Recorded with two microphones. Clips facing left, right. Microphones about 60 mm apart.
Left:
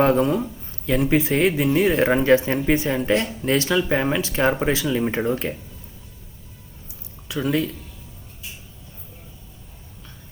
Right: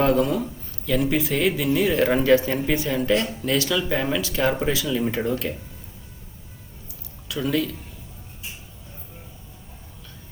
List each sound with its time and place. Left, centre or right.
0.0 s speech: left
7.3 s speech: left